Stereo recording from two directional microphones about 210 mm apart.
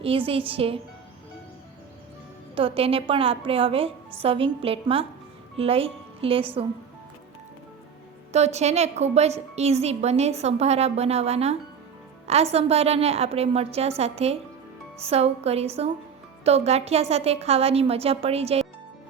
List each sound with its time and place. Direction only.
0.0 s a woman's voice: 25° right (ahead or behind)
2.6 s a woman's voice: 25° right (ahead or behind)
8.3 s a woman's voice: 30° right (ahead or behind)